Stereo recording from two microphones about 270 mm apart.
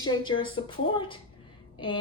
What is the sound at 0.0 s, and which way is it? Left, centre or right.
A woman's voice, centre.